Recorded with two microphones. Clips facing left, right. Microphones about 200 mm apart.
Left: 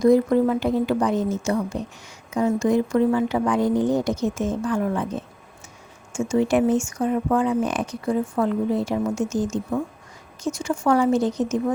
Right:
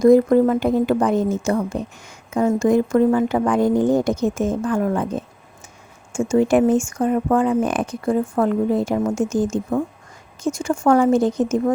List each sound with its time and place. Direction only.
0.0 s speech: 50° right (ahead or behind)